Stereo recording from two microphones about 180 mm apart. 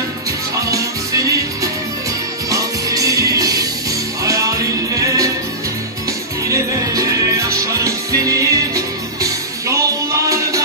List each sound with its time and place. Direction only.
0.6 s music: 20° right (ahead or behind)
6.4 s music: 20° right (ahead or behind)